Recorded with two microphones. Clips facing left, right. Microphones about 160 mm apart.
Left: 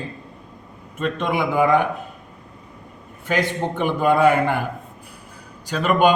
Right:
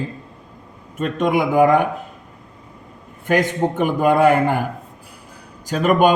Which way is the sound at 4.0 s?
45° right (ahead or behind).